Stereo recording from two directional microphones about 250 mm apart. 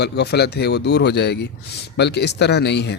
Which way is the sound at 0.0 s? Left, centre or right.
Left.